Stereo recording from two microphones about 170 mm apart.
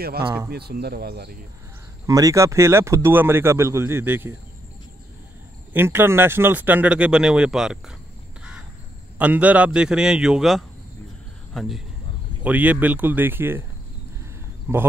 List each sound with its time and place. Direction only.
0.5 s speech: 70° right (ahead or behind)
2.0 s speech: 20° right (ahead or behind)
5.7 s speech: 15° right (ahead or behind)
9.2 s a man's voice: 10° right (ahead or behind)
12.4 s speech: 10° right (ahead or behind)
14.7 s speech: 10° right (ahead or behind)